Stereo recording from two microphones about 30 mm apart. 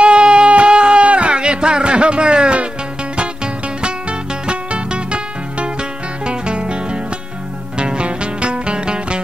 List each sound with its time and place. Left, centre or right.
0.0 s music: right
0.5 s a sound: right
1.0 s music: right
3.8 s music: right